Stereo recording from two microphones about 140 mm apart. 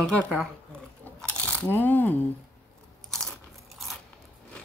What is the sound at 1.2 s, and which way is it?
Coin, 10° left (ahead or behind).